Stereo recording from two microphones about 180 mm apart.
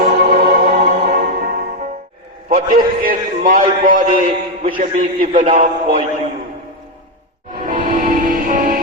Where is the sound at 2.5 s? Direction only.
50° right (ahead or behind).